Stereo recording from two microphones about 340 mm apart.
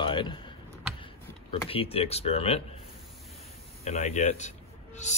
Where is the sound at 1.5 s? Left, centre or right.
Centre.